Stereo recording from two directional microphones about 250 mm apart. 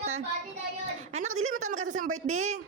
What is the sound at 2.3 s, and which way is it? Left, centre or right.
Speech, right.